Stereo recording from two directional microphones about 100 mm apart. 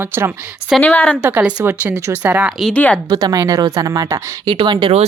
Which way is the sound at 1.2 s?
20° right (ahead or behind).